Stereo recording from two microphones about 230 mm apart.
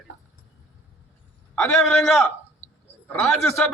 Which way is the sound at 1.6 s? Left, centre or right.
Centre.